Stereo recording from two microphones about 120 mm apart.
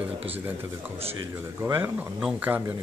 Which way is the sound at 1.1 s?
20° right (ahead or behind).